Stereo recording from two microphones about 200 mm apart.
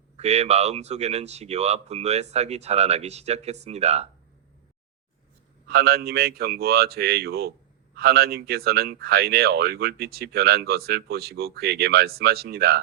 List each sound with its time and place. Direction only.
0.2 s speech: 30° right (ahead or behind)
5.6 s speech: 50° right (ahead or behind)